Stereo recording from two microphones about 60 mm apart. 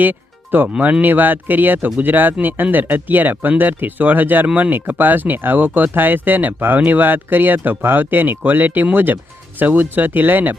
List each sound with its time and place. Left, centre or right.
0.0 s speech: right